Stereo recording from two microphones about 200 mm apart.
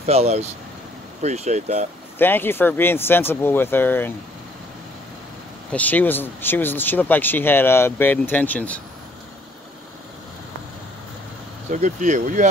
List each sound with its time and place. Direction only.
0.0 s speech: 30° right (ahead or behind)
2.1 s speech: 10° left (ahead or behind)
5.7 s speech: 10° left (ahead or behind)
11.7 s speech: 40° right (ahead or behind)